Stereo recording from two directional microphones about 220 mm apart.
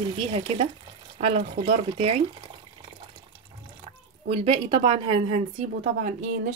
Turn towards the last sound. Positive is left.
turn(degrees=-35)  # may be behind; listen again after turning